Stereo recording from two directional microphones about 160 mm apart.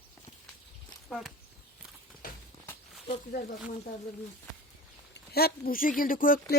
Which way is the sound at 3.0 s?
70° left (ahead or behind).